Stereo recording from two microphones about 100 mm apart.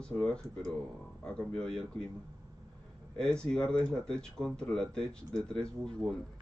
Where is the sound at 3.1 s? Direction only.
10° left (ahead or behind).